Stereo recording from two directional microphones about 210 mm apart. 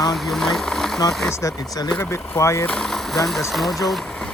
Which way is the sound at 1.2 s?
15° left (ahead or behind).